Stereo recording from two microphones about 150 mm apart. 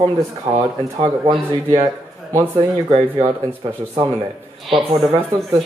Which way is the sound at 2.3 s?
40° right (ahead or behind).